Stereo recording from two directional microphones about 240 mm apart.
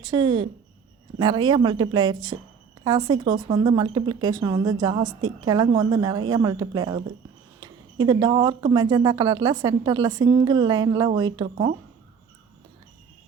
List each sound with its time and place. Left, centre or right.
0.0 s speech: centre